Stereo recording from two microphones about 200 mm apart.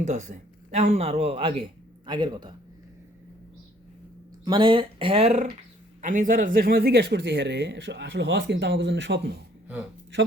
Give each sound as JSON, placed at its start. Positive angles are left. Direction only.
{"t": 0.0, "sound": "speech", "side_deg": -35}
{"t": 4.4, "sound": "speech", "side_deg": -25}